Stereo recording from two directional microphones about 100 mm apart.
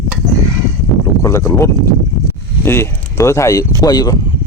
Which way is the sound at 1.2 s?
25° left (ahead or behind).